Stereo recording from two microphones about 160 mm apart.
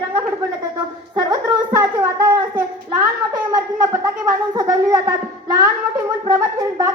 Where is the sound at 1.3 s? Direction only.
20° right (ahead or behind).